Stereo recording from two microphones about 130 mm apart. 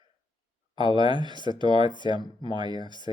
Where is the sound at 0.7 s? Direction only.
35° right (ahead or behind).